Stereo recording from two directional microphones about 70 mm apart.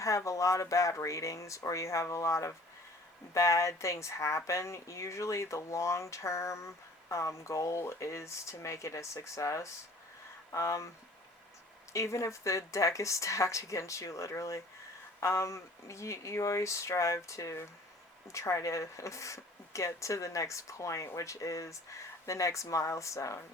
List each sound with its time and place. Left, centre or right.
0.3 s speech: left
11.9 s speech: left